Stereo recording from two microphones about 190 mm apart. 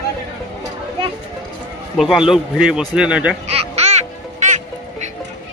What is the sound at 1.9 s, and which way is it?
Speech, centre (ahead or behind).